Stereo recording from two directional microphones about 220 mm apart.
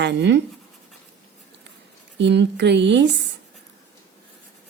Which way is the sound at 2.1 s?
50° right (ahead or behind).